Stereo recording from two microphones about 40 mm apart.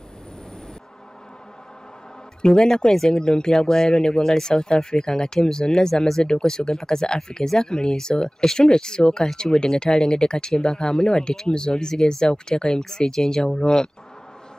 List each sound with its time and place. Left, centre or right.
2.4 s speech: centre